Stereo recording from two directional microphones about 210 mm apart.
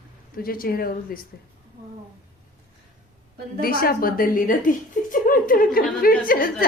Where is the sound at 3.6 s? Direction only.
45° left (ahead or behind).